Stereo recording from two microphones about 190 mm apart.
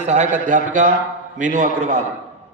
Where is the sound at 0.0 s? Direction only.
35° right (ahead or behind).